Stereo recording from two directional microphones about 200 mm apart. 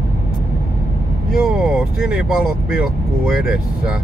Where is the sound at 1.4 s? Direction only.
Centre (ahead or behind).